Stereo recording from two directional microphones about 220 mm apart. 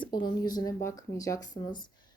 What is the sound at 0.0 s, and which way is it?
A woman's voice, 20° left (ahead or behind).